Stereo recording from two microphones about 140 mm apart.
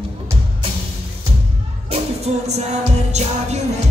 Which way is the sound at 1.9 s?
50° right (ahead or behind).